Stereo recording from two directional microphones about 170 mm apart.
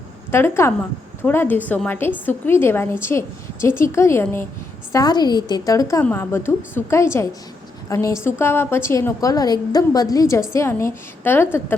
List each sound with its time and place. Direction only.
0.3 s a woman's voice: 15° left (ahead or behind)